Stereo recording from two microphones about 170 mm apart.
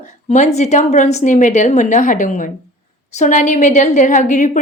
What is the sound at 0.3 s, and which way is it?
A woman's voice, 40° left (ahead or behind).